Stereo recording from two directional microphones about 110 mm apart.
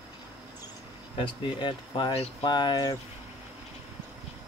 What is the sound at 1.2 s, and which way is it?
Speech, 45° left (ahead or behind).